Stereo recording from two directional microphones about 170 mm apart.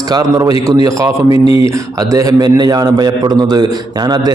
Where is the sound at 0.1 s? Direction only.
20° right (ahead or behind).